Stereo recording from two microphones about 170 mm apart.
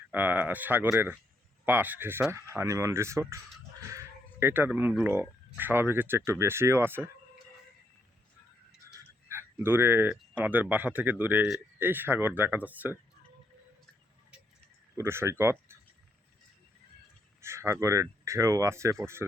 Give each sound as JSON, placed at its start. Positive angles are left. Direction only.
{"t": 0.1, "sound": "speech", "side_deg": -10}
{"t": 3.8, "sound": "a sound", "side_deg": -15}
{"t": 5.0, "sound": "speech", "side_deg": -10}
{"t": 8.9, "sound": "speech", "side_deg": -15}
{"t": 14.9, "sound": "speech", "side_deg": -15}
{"t": 17.4, "sound": "speech", "side_deg": -15}